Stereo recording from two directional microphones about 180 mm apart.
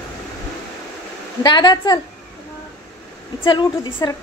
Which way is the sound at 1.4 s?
25° left (ahead or behind).